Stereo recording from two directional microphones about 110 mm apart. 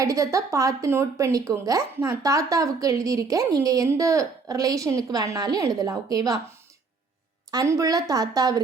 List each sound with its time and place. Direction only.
0.0 s speech: 30° right (ahead or behind)
7.5 s speech: 30° right (ahead or behind)